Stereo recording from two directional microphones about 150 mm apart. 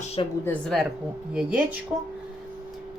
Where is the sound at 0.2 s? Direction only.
40° left (ahead or behind).